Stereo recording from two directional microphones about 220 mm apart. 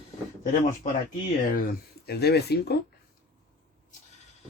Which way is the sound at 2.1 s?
45° left (ahead or behind).